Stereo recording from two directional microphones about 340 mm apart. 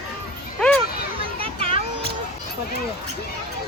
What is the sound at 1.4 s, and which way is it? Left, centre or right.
Children playing, centre.